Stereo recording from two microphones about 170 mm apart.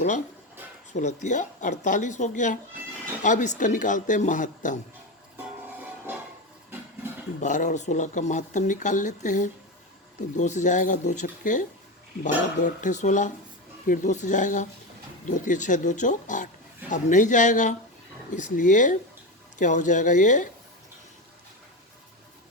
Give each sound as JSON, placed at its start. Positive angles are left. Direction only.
{"t": 0.9, "sound": "speech", "side_deg": 45}
{"t": 7.4, "sound": "speech", "side_deg": 45}